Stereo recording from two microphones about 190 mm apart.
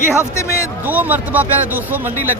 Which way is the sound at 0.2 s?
15° left (ahead or behind).